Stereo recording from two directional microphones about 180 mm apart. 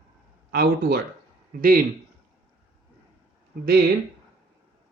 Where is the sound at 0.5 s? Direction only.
55° right (ahead or behind).